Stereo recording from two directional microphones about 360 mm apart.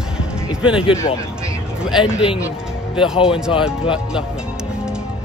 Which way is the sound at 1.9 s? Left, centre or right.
Centre.